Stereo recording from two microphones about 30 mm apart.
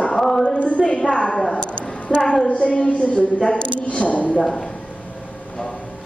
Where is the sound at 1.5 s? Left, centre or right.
Left.